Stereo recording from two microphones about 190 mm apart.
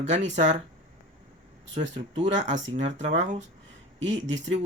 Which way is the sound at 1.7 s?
35° right (ahead or behind).